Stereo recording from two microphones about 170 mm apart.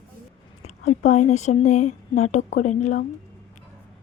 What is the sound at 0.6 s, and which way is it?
Speech, 40° left (ahead or behind).